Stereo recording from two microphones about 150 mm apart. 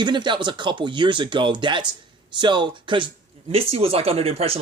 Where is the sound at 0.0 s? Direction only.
30° right (ahead or behind).